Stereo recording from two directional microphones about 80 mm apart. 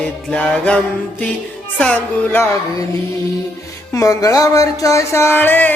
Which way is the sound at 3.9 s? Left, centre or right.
Left.